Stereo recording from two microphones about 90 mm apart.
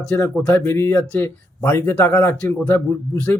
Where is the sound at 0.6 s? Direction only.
25° left (ahead or behind).